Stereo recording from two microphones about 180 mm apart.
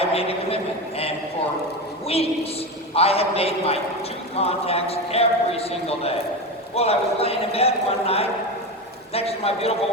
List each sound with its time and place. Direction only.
0.1 s a man's voice: 35° left (ahead or behind)